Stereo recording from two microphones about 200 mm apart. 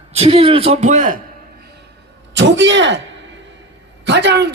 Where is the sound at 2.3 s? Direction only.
65° right (ahead or behind).